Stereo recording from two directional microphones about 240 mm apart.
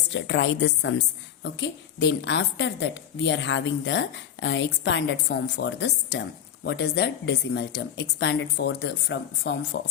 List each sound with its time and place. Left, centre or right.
0.1 s a woman's voice: left